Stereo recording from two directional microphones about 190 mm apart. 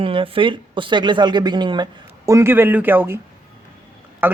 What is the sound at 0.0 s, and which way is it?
Speech, 30° right (ahead or behind).